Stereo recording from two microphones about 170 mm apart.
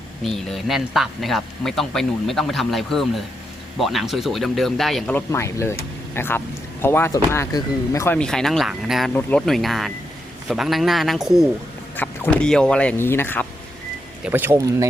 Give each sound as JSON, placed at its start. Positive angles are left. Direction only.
{"t": 0.2, "sound": "speech", "side_deg": 0}
{"t": 5.1, "sound": "speech", "side_deg": 15}
{"t": 11.9, "sound": "speech", "side_deg": 10}
{"t": 14.3, "sound": "speech", "side_deg": -10}